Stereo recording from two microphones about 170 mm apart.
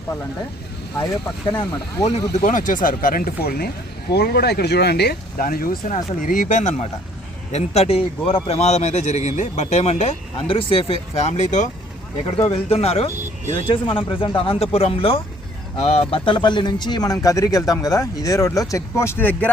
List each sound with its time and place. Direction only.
1.5 s speech: 25° left (ahead or behind)
2.3 s speech: 50° left (ahead or behind)
5.9 s speech: 45° left (ahead or behind); by 19.5 s 10° left (ahead or behind)